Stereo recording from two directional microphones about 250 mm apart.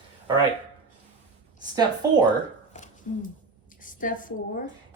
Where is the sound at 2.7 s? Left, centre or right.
Left.